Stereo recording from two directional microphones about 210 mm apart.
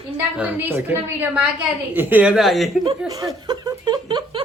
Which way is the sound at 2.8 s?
20° right (ahead or behind).